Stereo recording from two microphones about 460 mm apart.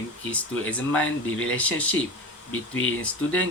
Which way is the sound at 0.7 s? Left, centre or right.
Centre.